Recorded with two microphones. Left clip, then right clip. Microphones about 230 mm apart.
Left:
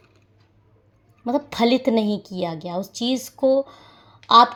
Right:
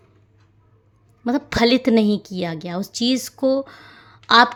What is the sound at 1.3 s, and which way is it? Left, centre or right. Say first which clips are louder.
A woman's voice: right 2 dB; right.